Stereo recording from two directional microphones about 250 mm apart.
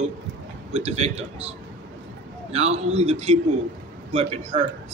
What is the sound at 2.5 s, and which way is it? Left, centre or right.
Speech, right.